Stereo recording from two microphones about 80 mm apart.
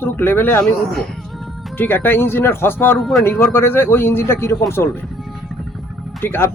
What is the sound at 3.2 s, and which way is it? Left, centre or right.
A man's voice, left.